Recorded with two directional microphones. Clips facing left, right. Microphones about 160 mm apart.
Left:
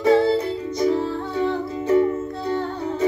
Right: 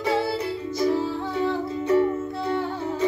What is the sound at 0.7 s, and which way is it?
Music, 5° right (ahead or behind).